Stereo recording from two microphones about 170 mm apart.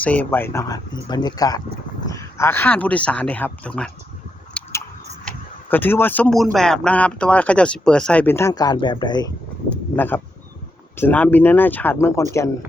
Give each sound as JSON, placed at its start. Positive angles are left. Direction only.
{"t": 0.0, "sound": "speech", "side_deg": 10}
{"t": 4.6, "sound": "chewing", "side_deg": 5}
{"t": 5.6, "sound": "speech", "side_deg": 10}
{"t": 9.9, "sound": "speech", "side_deg": 10}